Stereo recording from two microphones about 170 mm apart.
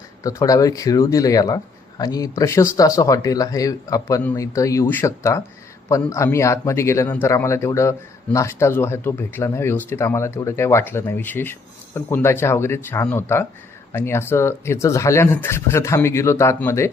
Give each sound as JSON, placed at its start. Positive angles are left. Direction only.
{"t": 0.2, "sound": "speech", "side_deg": 20}